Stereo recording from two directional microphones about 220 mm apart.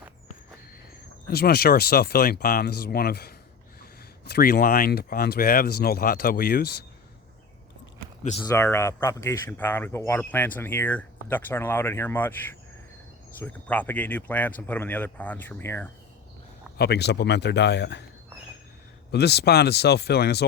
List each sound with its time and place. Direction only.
1.3 s speech: 45° left (ahead or behind)
8.3 s speech: 20° left (ahead or behind)
13.4 s speech: 10° left (ahead or behind)
16.7 s speech: 45° left (ahead or behind)
19.1 s speech: 50° left (ahead or behind)